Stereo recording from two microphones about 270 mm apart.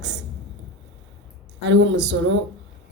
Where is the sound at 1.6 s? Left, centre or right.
Right.